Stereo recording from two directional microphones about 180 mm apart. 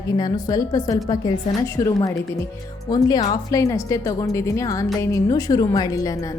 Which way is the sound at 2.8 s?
25° left (ahead or behind).